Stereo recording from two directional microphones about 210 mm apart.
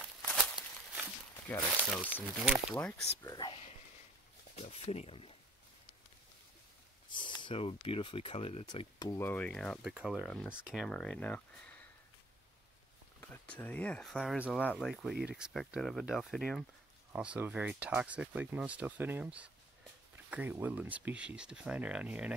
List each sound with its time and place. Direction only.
0.6 s walk: 5° right (ahead or behind)
1.5 s speech: 10° left (ahead or behind)
3.2 s speech: 20° left (ahead or behind)
7.1 s speech: 20° left (ahead or behind); by 11.8 s 5° left (ahead or behind)
13.2 s speech: 10° left (ahead or behind)